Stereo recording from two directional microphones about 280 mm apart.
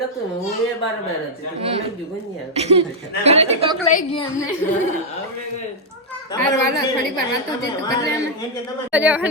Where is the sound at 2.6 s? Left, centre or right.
Right.